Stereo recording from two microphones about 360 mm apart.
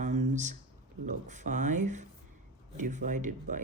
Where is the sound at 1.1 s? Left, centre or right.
Centre.